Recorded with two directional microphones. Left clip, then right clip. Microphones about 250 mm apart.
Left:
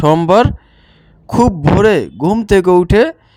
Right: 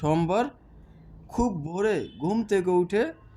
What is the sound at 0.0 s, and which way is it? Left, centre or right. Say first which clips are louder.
Speech: left 15 dB; left.